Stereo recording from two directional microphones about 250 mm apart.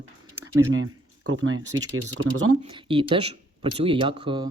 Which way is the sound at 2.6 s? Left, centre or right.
Centre.